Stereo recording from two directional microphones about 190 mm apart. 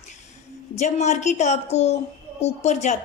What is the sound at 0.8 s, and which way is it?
Speech, 40° left (ahead or behind).